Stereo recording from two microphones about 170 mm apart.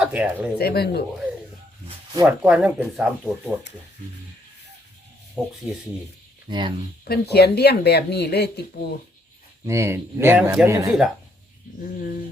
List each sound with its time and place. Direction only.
0.0 s speech: 5° right (ahead or behind)
0.6 s speech: 70° left (ahead or behind)
2.2 s speech: 5° right (ahead or behind)
5.4 s speech: 5° right (ahead or behind)
6.5 s speech: 25° right (ahead or behind)
7.1 s speech: 75° left (ahead or behind)
9.6 s a man's voice: 15° right (ahead or behind)
11.8 s speech: 55° left (ahead or behind)